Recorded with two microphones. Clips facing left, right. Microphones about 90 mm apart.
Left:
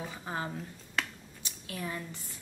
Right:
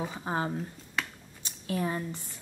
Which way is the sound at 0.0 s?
25° right (ahead or behind).